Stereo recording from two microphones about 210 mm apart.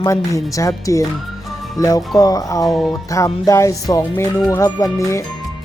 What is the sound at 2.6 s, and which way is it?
Speech, centre (ahead or behind).